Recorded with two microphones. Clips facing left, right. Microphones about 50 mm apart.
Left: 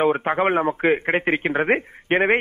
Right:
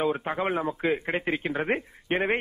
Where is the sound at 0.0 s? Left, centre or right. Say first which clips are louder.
Left 8 dB; left.